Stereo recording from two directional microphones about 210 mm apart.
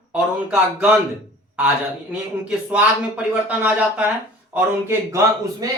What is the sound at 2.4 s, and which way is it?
A man's voice, 5° right (ahead or behind).